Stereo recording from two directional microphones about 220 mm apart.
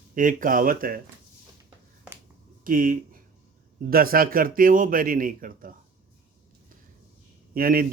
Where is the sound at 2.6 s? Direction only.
40° right (ahead or behind).